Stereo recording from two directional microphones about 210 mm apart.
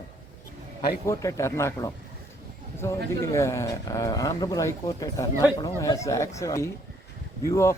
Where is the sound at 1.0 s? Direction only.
15° left (ahead or behind).